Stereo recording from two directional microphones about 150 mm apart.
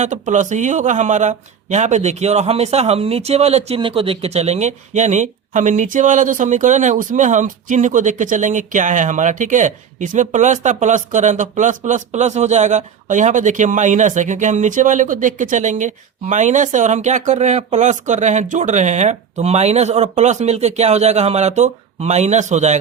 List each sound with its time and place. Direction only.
0.0 s speech: 55° right (ahead or behind)